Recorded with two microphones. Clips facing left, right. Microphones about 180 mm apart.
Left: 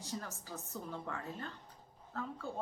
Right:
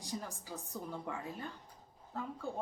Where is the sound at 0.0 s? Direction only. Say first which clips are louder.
Right 1 dB; 15° right (ahead or behind).